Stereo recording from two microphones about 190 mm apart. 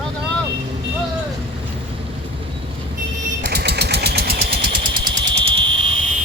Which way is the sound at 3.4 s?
60° right (ahead or behind).